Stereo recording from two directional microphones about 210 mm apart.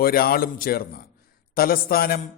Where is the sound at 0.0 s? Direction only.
45° left (ahead or behind).